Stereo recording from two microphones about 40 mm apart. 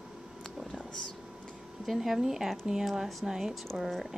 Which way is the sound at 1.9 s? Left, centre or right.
Centre.